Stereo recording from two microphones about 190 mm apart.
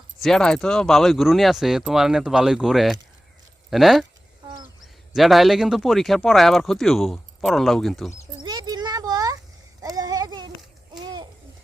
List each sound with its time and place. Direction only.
0.2 s speech: 5° left (ahead or behind)
5.1 s speech: centre (ahead or behind)
8.4 s a sound: 20° right (ahead or behind)
10.9 s babbling: 20° right (ahead or behind)